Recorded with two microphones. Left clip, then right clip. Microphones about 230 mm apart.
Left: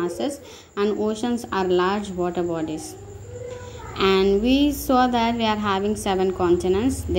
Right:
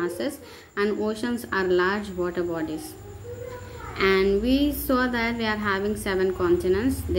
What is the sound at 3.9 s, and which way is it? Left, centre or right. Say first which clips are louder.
A woman's voice: left 2 dB; centre.